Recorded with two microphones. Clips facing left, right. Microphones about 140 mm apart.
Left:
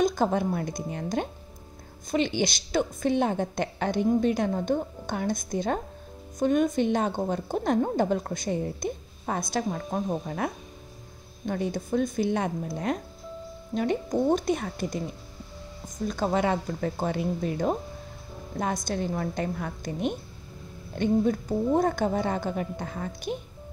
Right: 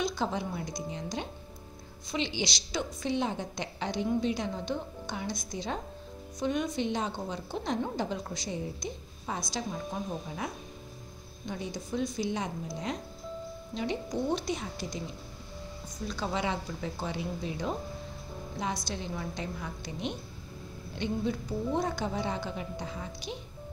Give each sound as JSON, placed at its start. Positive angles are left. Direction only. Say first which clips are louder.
{"t": 0.0, "sound": "a woman's voice", "louder": "left 8 dB", "side_deg": 50}
{"t": 16.1, "sound": "a woman's voice", "louder": "left 7 dB", "side_deg": 50}